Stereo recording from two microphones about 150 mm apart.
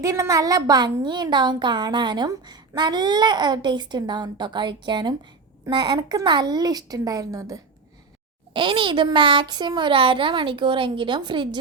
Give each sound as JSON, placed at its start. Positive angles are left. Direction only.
{"t": 0.0, "sound": "a woman's voice", "side_deg": -20}
{"t": 8.5, "sound": "a child's voice", "side_deg": -35}